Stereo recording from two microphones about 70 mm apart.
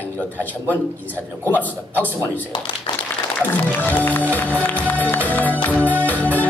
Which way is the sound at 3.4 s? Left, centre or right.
Left.